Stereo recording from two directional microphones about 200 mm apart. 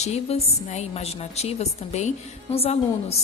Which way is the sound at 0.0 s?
30° left (ahead or behind).